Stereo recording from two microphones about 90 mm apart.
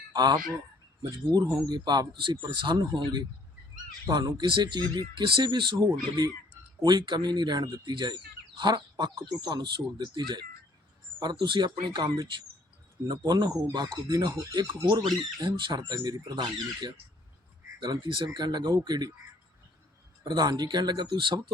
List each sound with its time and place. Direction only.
0.1 s speech: 50° right (ahead or behind)
15.4 s speech: 65° right (ahead or behind)
17.7 s speech: 65° right (ahead or behind)
20.2 s speech: 55° right (ahead or behind)